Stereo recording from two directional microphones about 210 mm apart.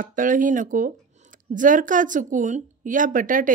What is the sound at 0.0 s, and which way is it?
Speech, 40° right (ahead or behind).